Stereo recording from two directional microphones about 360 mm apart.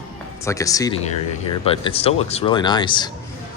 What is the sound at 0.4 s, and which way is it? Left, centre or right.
A man's voice, centre.